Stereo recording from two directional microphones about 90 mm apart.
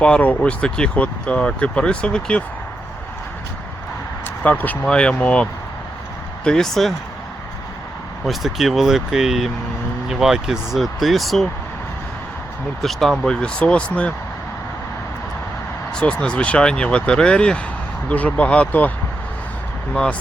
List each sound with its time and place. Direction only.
0.0 s speech: 15° left (ahead or behind)
4.4 s speech: 20° left (ahead or behind)
6.4 s speech: 5° left (ahead or behind)
8.3 s speech: centre (ahead or behind)
12.8 s speech: centre (ahead or behind)
16.0 s speech: 10° left (ahead or behind)
19.9 s speech: 15° left (ahead or behind)